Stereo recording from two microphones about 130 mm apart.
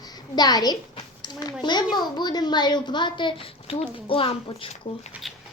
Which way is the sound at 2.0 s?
35° left (ahead or behind).